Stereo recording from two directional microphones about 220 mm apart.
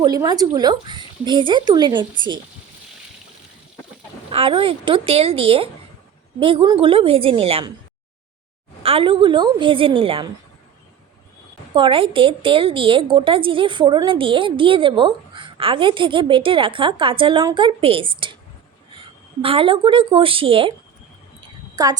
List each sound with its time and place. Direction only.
0.0 s a woman's voice: 20° right (ahead or behind)
4.3 s a woman's voice: 25° right (ahead or behind)
8.8 s a woman's voice: 25° right (ahead or behind)
11.7 s a woman's voice: 25° right (ahead or behind)
19.4 s a woman's voice: 25° right (ahead or behind)
21.8 s a woman's voice: 15° right (ahead or behind)